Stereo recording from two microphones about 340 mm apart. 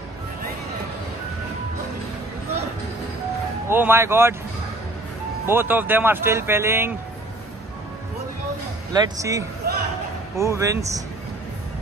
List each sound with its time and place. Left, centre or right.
3.6 s speech: centre
5.5 s speech: centre
8.9 s speech: centre
9.6 s speech: right
10.3 s speech: centre